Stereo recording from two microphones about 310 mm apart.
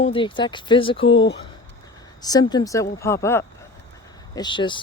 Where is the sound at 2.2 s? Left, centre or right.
Centre.